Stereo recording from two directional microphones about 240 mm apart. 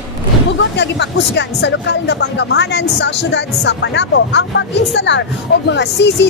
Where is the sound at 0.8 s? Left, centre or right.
Left.